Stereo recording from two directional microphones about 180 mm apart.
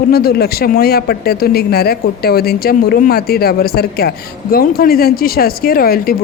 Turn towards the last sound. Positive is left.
turn(degrees=55)  # may be behind; listen again after turning